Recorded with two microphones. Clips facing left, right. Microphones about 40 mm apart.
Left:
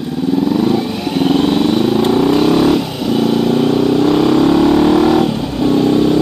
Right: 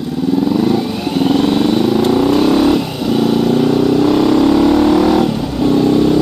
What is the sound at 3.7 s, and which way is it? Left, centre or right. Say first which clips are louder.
Vehicle: even; centre.